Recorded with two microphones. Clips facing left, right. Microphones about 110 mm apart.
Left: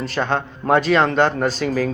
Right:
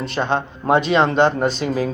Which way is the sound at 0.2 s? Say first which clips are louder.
Right 1 dB; 20° right (ahead or behind).